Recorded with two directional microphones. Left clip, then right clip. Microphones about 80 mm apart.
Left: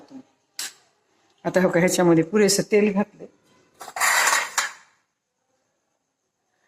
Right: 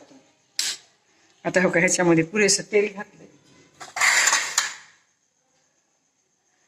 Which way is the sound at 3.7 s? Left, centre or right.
Left.